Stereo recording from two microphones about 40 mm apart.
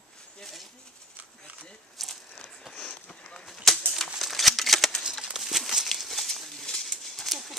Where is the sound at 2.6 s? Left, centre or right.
Centre.